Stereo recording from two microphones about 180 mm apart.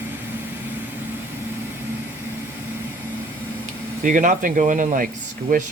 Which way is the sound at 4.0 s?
45° right (ahead or behind).